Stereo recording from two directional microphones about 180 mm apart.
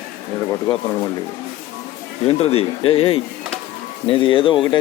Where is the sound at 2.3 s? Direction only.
30° left (ahead or behind).